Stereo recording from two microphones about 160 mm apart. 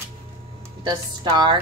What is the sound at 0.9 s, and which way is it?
Speech, 25° right (ahead or behind).